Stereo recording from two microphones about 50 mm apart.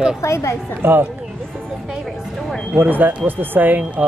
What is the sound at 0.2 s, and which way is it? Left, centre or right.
Speech, left.